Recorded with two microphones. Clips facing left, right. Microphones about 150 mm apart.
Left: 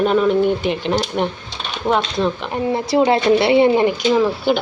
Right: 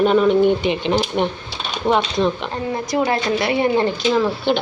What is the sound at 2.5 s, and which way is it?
Speech, 25° left (ahead or behind).